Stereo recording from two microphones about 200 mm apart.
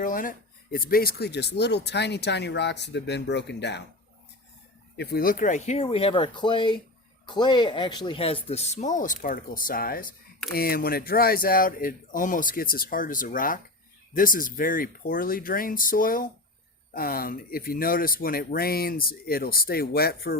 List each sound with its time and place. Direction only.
0.0 s speech: 45° left (ahead or behind); by 3.8 s 60° left (ahead or behind)
4.9 s speech: 50° left (ahead or behind)